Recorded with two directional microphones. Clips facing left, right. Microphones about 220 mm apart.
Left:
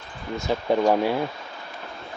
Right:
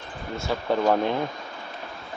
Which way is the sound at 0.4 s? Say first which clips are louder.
Left 3 dB; 15° left (ahead or behind).